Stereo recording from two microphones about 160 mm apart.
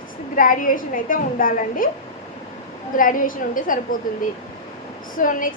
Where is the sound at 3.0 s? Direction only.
60° left (ahead or behind).